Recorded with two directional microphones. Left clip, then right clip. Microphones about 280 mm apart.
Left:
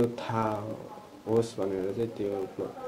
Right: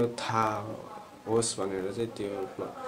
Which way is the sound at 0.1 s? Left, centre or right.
Centre.